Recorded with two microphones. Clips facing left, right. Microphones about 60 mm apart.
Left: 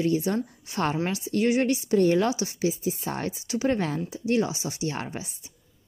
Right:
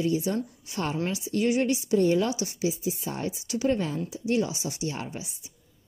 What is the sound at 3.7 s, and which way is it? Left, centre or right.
Speech, left.